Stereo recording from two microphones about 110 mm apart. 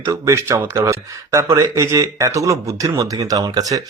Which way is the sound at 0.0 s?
30° right (ahead or behind).